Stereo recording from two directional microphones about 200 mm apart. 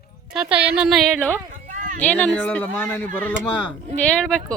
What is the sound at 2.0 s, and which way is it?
A woman's voice, 5° left (ahead or behind).